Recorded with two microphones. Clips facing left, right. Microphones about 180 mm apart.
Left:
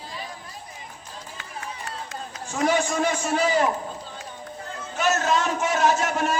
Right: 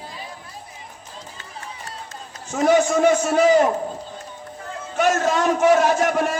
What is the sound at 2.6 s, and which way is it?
Speech, 50° right (ahead or behind).